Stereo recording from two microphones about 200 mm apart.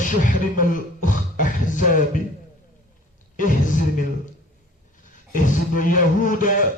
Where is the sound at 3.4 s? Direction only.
40° left (ahead or behind).